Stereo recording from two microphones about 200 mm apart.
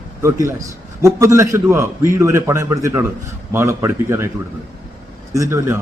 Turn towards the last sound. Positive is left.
turn(degrees=-15)  # may be behind; listen again after turning